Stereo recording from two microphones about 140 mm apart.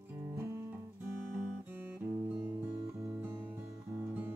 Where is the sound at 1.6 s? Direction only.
15° right (ahead or behind).